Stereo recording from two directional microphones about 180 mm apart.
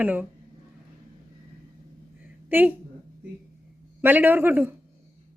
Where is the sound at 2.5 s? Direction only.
10° right (ahead or behind).